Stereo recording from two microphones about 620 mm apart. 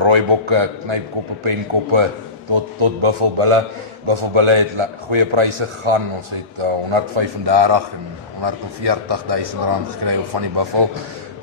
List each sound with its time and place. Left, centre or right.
0.0 s a man's voice: right